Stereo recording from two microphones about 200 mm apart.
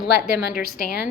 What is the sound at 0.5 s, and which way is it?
Speech, 45° left (ahead or behind).